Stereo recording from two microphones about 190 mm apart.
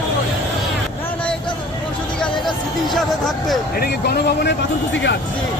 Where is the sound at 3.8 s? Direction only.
55° left (ahead or behind).